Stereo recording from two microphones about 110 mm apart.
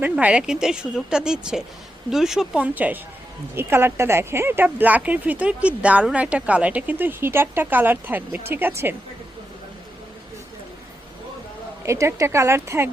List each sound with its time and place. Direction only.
0.0 s speech: 10° right (ahead or behind)
2.7 s speech: 15° right (ahead or behind)
11.9 s speech: 25° right (ahead or behind)